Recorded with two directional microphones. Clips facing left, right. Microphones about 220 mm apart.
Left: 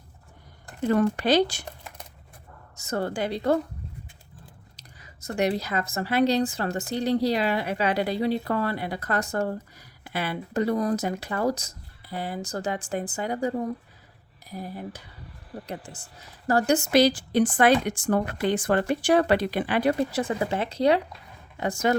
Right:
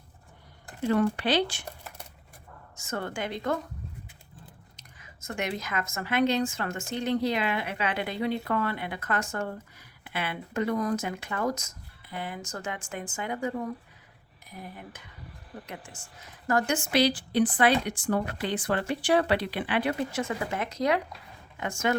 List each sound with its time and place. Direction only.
0.8 s speech: 45° left (ahead or behind)
2.7 s a woman's voice: 35° left (ahead or behind)
4.8 s a woman's voice: 35° left (ahead or behind)